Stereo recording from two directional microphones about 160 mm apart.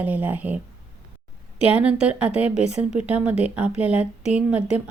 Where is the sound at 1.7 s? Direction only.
5° right (ahead or behind).